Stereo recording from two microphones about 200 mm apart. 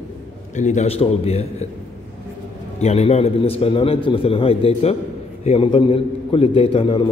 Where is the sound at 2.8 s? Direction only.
30° left (ahead or behind).